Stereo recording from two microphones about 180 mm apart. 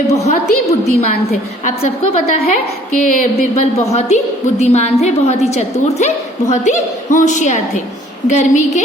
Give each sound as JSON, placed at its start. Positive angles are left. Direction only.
{"t": 0.1, "sound": "a woman's voice", "side_deg": 35}
{"t": 3.0, "sound": "a woman's voice", "side_deg": 45}